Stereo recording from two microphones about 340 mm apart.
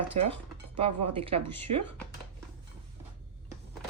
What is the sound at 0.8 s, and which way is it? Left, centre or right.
Speech, centre.